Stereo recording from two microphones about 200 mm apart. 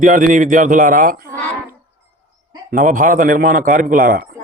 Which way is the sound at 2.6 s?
45° right (ahead or behind).